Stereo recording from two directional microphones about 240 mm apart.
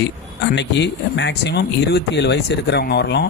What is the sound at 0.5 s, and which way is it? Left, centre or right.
Speech, left.